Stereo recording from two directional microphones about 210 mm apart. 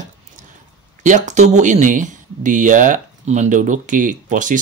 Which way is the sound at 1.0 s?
35° right (ahead or behind).